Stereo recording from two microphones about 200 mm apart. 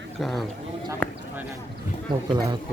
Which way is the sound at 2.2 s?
20° right (ahead or behind).